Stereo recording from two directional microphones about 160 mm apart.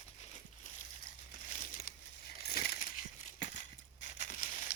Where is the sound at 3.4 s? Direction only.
50° left (ahead or behind).